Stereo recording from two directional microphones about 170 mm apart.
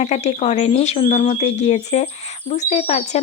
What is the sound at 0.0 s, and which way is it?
Speech, 40° left (ahead or behind).